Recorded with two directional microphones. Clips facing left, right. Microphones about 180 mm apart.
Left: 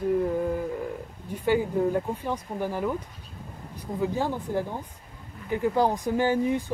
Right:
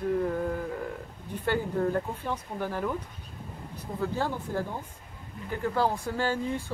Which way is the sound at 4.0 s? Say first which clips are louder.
Left 3 dB; 15° left (ahead or behind).